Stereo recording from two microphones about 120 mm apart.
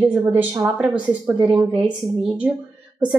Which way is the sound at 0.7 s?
5° right (ahead or behind).